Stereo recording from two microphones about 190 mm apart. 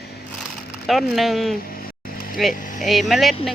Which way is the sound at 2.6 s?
45° left (ahead or behind).